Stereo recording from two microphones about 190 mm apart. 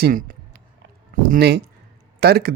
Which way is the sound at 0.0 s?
45° right (ahead or behind).